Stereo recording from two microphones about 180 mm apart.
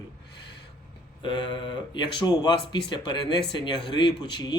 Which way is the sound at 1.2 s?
25° left (ahead or behind).